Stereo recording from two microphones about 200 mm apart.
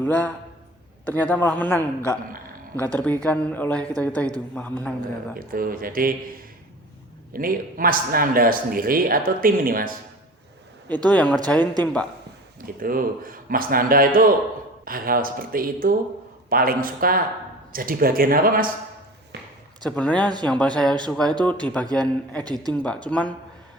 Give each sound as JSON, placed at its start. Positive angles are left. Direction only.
{"t": 0.0, "sound": "speech", "side_deg": 10}
{"t": 3.2, "sound": "speech", "side_deg": 10}
{"t": 5.4, "sound": "a man's voice", "side_deg": -45}
{"t": 7.3, "sound": "a man's voice", "side_deg": -45}
{"t": 10.8, "sound": "speech", "side_deg": 10}
{"t": 12.6, "sound": "a man's voice", "side_deg": -45}
{"t": 19.8, "sound": "speech", "side_deg": 5}
{"t": 22.4, "sound": "speech", "side_deg": -20}
{"t": 22.7, "sound": "speech", "side_deg": 5}